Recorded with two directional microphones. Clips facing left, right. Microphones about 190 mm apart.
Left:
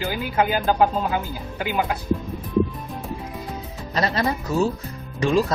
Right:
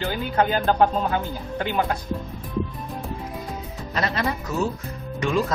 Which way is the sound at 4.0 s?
35° left (ahead or behind).